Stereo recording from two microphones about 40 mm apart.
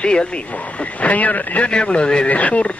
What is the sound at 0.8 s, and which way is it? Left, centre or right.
Speech, left.